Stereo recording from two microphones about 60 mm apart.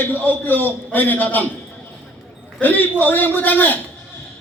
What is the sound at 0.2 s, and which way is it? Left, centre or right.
A man's voice, left.